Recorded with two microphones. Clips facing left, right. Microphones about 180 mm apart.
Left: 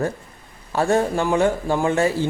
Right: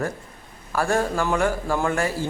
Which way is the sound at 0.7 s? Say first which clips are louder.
Left 3 dB; 25° left (ahead or behind).